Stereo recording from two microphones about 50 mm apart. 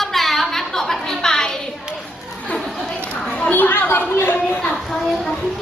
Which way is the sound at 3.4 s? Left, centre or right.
Left.